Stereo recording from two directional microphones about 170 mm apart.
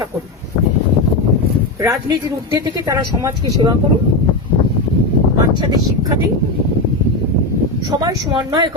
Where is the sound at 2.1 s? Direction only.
25° right (ahead or behind).